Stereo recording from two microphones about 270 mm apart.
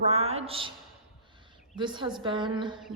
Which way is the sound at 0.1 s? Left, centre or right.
Right.